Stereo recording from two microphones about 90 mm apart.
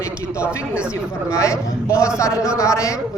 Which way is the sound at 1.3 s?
35° left (ahead or behind).